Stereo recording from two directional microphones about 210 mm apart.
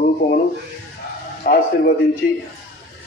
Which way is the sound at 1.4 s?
45° left (ahead or behind).